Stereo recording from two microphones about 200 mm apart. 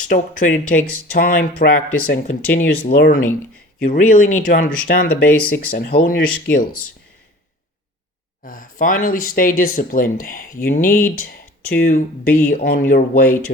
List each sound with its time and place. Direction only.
0.0 s speech: 40° left (ahead or behind)
8.4 s speech: 40° left (ahead or behind)